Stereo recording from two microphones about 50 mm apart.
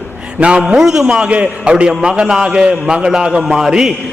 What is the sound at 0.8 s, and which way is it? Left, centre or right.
A man's voice, centre.